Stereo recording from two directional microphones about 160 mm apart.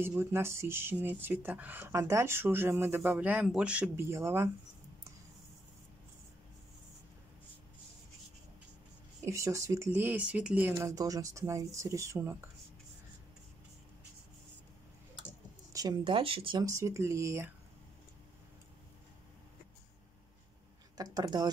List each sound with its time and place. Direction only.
0.0 s speech: 15° right (ahead or behind)
9.2 s speech: 20° right (ahead or behind)
15.7 s speech: 25° right (ahead or behind)
16.6 s speech: 20° right (ahead or behind)
21.0 s speech: 25° right (ahead or behind)